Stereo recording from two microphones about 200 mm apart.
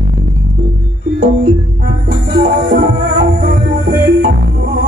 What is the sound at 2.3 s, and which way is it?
Music, 55° right (ahead or behind).